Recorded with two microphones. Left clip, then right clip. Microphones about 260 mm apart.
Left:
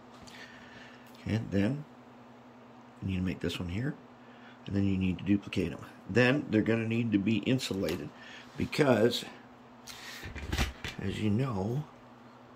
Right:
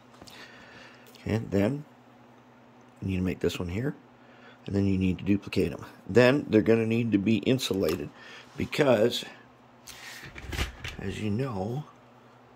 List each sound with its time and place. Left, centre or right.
0.2 s a sound: right
3.1 s speech: centre
11.0 s speech: centre